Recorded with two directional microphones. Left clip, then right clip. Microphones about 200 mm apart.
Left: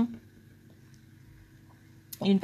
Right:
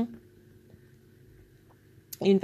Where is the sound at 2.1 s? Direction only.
20° right (ahead or behind).